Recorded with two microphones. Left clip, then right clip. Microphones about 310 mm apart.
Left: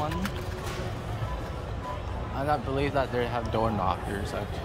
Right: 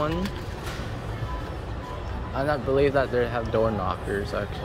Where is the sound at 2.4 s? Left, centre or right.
Centre.